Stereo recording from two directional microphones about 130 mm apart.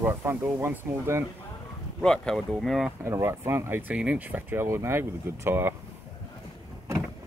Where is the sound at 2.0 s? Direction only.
5° left (ahead or behind).